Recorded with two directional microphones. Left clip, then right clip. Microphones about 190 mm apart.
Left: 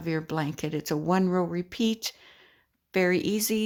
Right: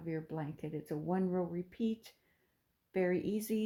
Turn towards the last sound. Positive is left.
turn(degrees=20)  # may be behind; listen again after turning